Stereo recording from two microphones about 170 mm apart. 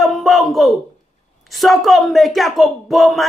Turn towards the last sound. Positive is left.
turn(degrees=0)  # may be behind; listen again after turning